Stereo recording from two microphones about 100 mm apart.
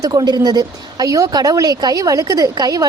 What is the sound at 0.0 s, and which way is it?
A woman's voice, 40° right (ahead or behind).